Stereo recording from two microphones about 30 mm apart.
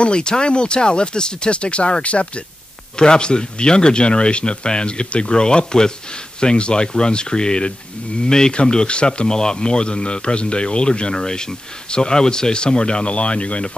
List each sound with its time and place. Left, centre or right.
0.0 s speech: left
3.0 s speech: left